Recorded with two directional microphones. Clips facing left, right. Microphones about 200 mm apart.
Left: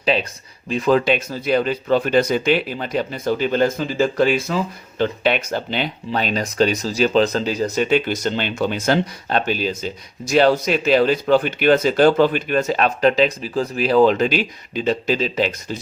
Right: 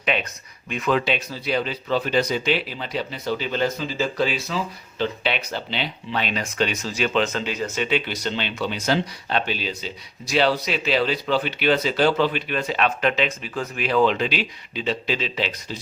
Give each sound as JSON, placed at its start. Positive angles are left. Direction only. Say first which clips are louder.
{"t": 0.0, "sound": "speech", "louder": "left 5 dB", "side_deg": 35}